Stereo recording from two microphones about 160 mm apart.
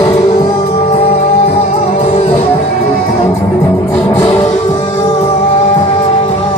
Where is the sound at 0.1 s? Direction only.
40° left (ahead or behind).